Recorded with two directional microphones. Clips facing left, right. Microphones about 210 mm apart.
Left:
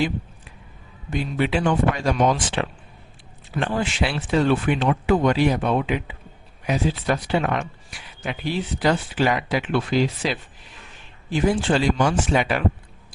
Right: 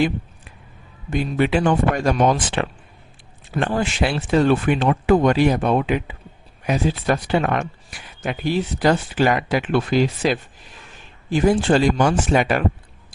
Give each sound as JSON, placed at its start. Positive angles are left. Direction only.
{"t": 1.1, "sound": "speech", "side_deg": -50}